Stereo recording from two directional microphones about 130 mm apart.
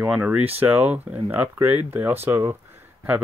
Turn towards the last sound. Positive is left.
turn(degrees=-20)  # may be behind; listen again after turning